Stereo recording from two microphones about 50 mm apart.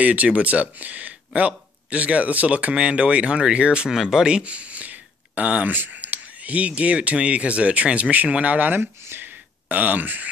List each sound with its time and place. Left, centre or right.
0.0 s speech: right
3.9 s speech: centre; by 8.8 s right
9.2 s a sound: right